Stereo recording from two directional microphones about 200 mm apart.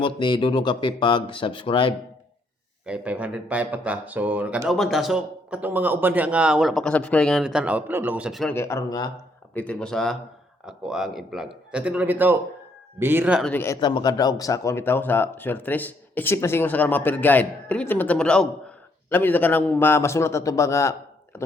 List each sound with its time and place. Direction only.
0.0 s speech: 25° left (ahead or behind)
2.8 s speech: 5° right (ahead or behind)
8.5 s speech: 15° left (ahead or behind)
9.6 s speech: 5° left (ahead or behind)
13.4 s speech: 10° left (ahead or behind)
13.7 s speech: 20° left (ahead or behind)